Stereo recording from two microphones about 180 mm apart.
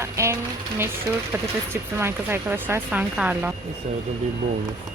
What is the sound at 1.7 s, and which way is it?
Speech, 15° right (ahead or behind).